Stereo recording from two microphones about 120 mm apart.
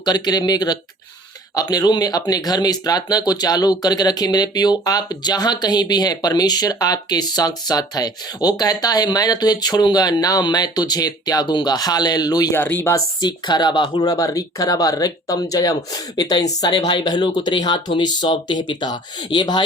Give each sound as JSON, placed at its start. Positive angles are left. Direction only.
{"t": 0.0, "sound": "speech", "side_deg": 35}
{"t": 12.5, "sound": "speech", "side_deg": 15}
{"t": 13.2, "sound": "speech", "side_deg": 35}
{"t": 14.0, "sound": "speech", "side_deg": 30}